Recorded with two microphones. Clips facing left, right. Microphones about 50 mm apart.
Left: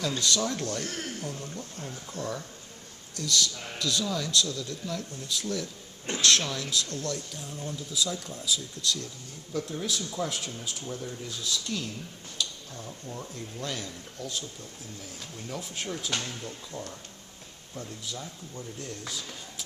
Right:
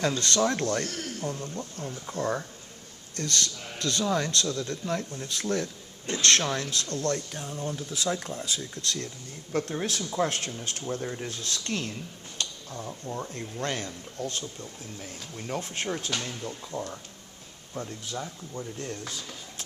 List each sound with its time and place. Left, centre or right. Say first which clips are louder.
0.0 s speech: right 3 dB; right
0.9 s speech: even; left
1.2 s speech: right 4 dB; right
9.5 s speech: right 3 dB; right
15.4 s speech: right 4 dB; right